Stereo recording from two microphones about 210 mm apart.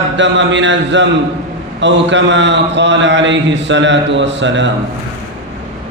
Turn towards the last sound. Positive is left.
turn(degrees=-60)  # may be behind; listen again after turning